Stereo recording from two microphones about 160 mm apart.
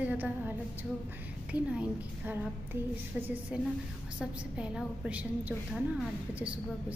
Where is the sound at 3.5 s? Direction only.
5° right (ahead or behind).